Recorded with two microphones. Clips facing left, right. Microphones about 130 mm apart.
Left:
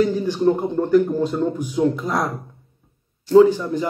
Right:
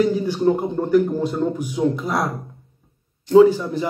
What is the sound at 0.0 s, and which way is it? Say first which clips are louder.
Speech: even; 15° right (ahead or behind).